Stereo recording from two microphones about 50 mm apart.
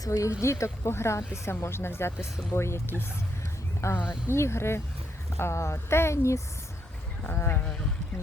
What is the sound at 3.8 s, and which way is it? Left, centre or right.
Speech, left.